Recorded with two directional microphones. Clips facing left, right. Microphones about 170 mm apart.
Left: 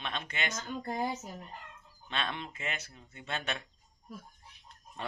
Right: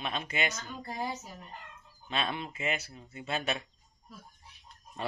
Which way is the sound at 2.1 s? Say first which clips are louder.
Right 3 dB; 5° right (ahead or behind).